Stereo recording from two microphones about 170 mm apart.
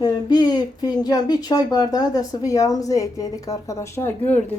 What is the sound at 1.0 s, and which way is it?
A woman's voice, 25° left (ahead or behind).